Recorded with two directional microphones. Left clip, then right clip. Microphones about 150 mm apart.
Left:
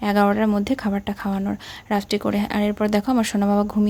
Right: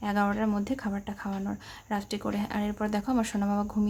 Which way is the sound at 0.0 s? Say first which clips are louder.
Left 9 dB; 55° left (ahead or behind).